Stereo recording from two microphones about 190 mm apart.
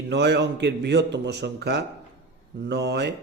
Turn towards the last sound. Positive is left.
turn(degrees=-65)  # may be behind; listen again after turning